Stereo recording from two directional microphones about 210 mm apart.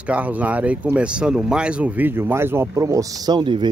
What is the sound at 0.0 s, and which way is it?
Speech, 5° right (ahead or behind).